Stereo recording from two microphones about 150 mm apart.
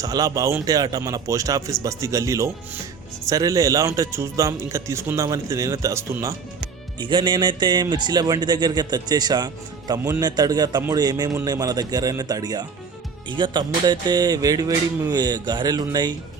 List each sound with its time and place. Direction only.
0.0 s a man's voice: 25° right (ahead or behind)
7.0 s a man's voice: 30° right (ahead or behind)